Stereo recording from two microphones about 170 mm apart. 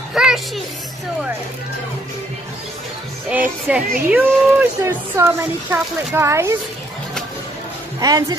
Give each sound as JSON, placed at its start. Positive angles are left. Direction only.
{"t": 0.1, "sound": "music", "side_deg": -5}
{"t": 3.3, "sound": "speech", "side_deg": -10}
{"t": 8.0, "sound": "speech", "side_deg": -20}